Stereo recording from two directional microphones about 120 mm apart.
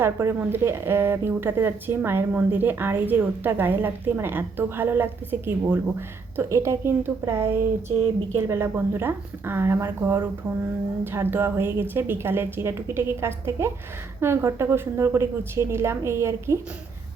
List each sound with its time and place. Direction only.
0.0 s speech: 20° right (ahead or behind)